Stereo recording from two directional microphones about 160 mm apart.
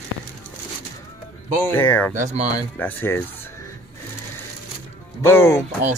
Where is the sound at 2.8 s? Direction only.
10° left (ahead or behind).